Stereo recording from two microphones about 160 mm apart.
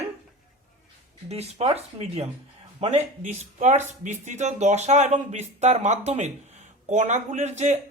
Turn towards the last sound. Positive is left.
turn(degrees=-45)  # may be behind; listen again after turning